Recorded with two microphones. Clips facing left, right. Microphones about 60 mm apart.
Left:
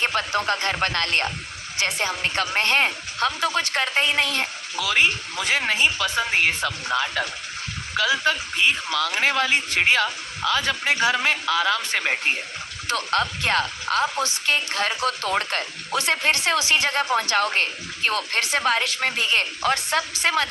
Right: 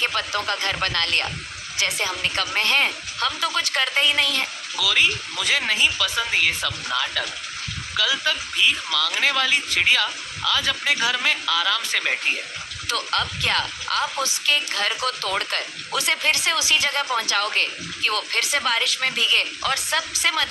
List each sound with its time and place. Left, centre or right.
0.0 s speech: left